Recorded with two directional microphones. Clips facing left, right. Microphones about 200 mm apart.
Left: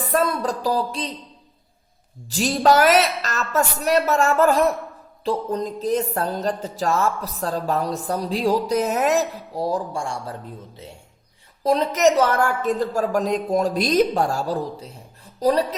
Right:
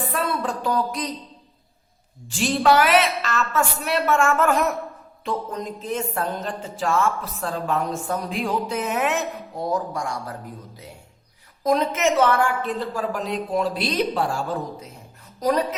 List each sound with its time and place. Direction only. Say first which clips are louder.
0.1 s a woman's voice: left 8 dB; 40° left (ahead or behind)
2.3 s speech: left 1 dB; 40° left (ahead or behind)
11.6 s speech: left 3 dB; 35° left (ahead or behind)